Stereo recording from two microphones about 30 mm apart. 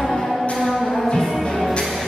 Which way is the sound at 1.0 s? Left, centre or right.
Centre.